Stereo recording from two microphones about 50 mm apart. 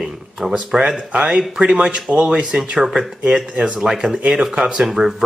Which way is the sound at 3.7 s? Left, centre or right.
Centre.